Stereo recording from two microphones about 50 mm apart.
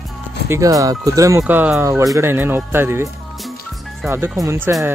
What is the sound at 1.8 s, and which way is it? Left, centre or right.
Speech, right.